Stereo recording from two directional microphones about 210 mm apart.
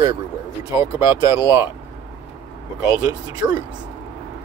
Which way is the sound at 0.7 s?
15° right (ahead or behind).